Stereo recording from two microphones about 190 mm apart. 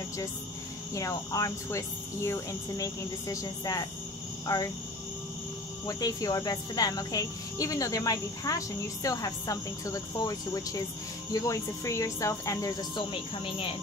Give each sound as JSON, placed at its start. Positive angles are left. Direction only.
{"t": 0.9, "sound": "speech", "side_deg": 15}
{"t": 5.9, "sound": "speech", "side_deg": 20}